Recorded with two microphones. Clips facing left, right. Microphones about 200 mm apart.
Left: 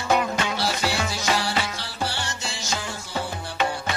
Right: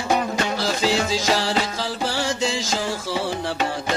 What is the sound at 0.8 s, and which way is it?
Music, 90° right.